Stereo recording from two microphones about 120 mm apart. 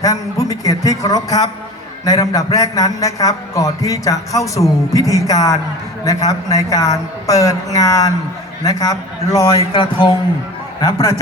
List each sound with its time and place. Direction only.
0.0 s a man's voice: 30° left (ahead or behind)